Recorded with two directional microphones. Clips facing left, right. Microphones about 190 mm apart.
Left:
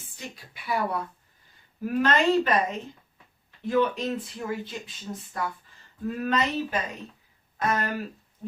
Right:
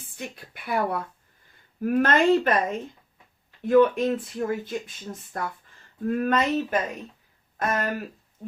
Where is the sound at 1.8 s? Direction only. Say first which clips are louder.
Right 3 dB; 50° right (ahead or behind).